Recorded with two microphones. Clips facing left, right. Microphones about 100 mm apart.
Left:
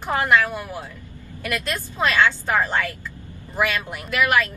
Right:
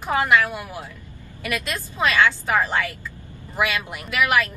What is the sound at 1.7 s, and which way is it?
Speech, 15° left (ahead or behind).